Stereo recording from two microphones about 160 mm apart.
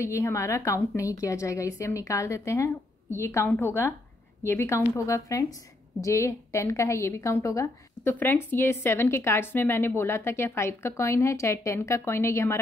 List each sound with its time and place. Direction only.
0.0 s a woman's voice: 20° left (ahead or behind)